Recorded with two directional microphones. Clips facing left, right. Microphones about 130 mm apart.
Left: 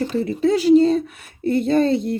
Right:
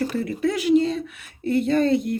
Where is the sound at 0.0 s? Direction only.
25° left (ahead or behind).